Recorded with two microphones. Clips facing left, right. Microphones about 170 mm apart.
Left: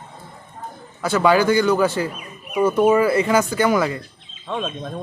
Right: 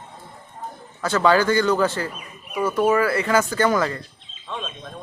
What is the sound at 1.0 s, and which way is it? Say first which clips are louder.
Speech: left 2 dB; 10° left (ahead or behind).